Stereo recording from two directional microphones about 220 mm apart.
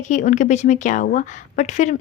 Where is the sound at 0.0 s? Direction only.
35° left (ahead or behind).